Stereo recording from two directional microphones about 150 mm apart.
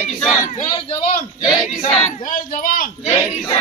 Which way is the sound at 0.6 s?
35° left (ahead or behind).